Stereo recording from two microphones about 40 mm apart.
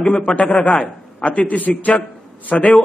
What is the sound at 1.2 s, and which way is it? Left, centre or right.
A man's voice, left.